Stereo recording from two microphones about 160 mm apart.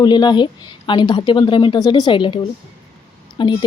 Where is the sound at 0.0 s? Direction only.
25° left (ahead or behind).